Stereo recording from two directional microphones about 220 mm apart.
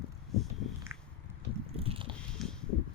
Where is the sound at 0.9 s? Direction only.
10° right (ahead or behind).